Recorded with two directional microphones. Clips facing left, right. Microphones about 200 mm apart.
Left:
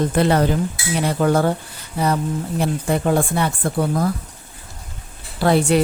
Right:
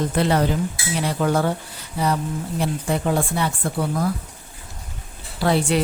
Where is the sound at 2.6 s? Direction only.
50° left (ahead or behind).